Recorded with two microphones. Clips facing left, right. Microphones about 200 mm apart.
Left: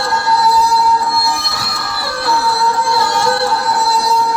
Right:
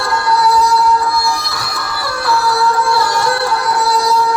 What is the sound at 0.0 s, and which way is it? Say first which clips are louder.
Music: right 1 dB; 25° left (ahead or behind).